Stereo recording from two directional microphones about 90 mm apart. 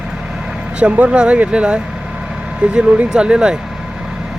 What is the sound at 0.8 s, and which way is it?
Speech, 15° right (ahead or behind).